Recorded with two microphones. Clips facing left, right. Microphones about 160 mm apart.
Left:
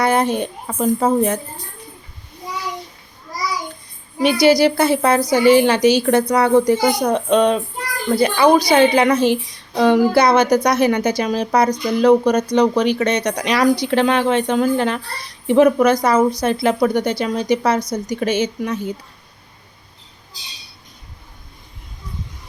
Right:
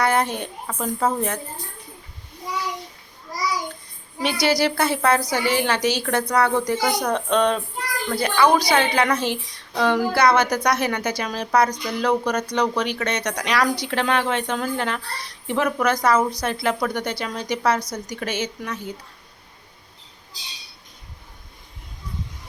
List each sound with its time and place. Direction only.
0.0 s speech: 20° left (ahead or behind)
4.2 s speech: 15° left (ahead or behind)
8.1 s speech: 25° left (ahead or behind)